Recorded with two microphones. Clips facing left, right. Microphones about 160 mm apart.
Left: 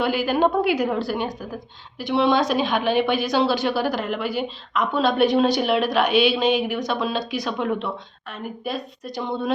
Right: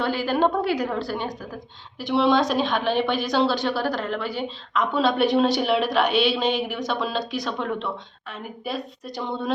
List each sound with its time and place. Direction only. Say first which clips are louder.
0.0 s a woman's voice: left 2 dB; 5° left (ahead or behind)